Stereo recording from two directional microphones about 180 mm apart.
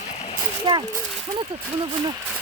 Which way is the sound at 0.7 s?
30° right (ahead or behind).